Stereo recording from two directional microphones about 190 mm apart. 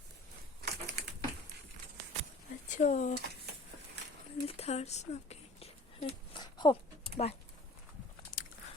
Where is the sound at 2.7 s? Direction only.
40° left (ahead or behind).